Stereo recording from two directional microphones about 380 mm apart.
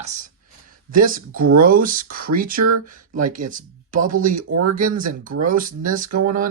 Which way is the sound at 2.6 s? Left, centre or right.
Right.